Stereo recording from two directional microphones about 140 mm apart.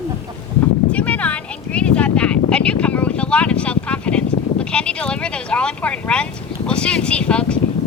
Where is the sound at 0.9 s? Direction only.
10° left (ahead or behind).